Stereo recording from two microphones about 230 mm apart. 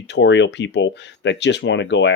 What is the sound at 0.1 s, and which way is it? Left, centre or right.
Speech, left.